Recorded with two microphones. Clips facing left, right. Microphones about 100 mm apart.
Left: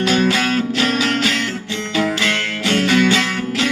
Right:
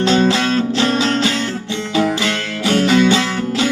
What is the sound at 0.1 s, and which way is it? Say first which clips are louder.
Music: right 3 dB; 25° right (ahead or behind).